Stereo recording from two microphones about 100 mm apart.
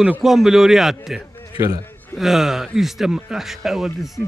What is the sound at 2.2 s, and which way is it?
Speech, 5° right (ahead or behind).